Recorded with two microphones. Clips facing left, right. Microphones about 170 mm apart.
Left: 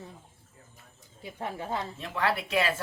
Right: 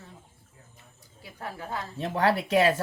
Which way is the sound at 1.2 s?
20° left (ahead or behind).